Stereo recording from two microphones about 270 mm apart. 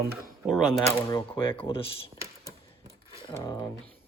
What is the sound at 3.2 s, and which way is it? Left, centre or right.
Speech, centre.